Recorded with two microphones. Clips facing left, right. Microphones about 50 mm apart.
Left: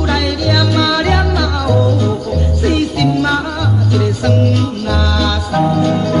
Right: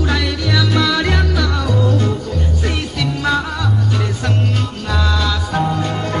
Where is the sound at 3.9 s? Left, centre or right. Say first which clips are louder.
Left 6 dB; centre.